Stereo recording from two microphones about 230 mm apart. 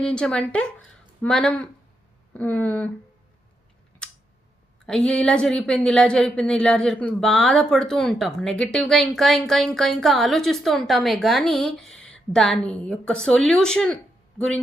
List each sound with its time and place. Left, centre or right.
0.0 s speech: centre
4.0 s a sound: centre
4.9 s speech: centre